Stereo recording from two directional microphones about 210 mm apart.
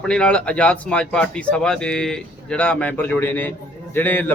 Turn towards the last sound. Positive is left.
turn(degrees=10)  # may be behind; listen again after turning